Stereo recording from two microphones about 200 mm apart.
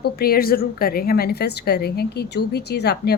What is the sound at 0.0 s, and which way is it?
A woman's voice, 50° left (ahead or behind).